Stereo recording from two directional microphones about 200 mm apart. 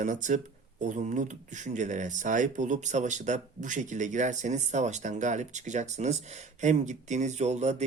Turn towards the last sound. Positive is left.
turn(degrees=-35)  # may be behind; listen again after turning